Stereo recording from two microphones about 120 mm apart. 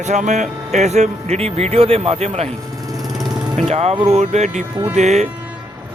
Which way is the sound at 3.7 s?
60° right (ahead or behind).